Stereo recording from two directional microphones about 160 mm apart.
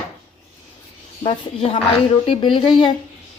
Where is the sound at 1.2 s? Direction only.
35° left (ahead or behind).